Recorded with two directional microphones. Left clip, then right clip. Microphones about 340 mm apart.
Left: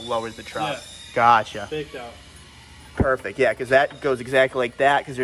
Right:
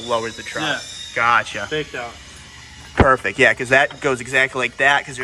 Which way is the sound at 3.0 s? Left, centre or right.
Centre.